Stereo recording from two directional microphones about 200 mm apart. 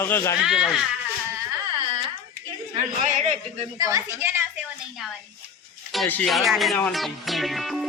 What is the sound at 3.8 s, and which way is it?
Speech, 15° right (ahead or behind).